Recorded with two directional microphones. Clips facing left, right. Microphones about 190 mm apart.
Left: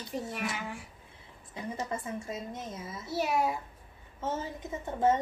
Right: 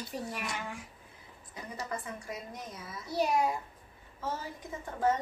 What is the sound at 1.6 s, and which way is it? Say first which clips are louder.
A woman's voice: left 4 dB; 25° left (ahead or behind).